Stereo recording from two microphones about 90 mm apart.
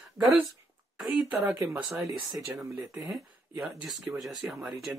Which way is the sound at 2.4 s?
35° right (ahead or behind).